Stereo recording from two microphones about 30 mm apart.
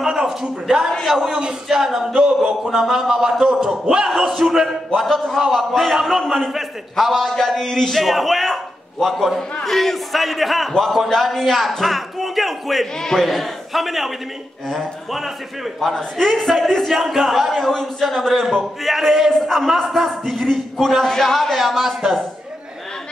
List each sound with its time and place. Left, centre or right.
0.0 s a sound: centre
1.0 s a man's voice: centre
4.2 s speech: centre
4.9 s speech: centre
7.0 s speech: centre
8.0 s speech: centre
13.0 s speech: centre
13.3 s speech: centre